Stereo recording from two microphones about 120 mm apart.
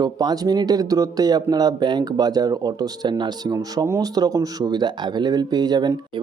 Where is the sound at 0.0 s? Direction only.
35° right (ahead or behind).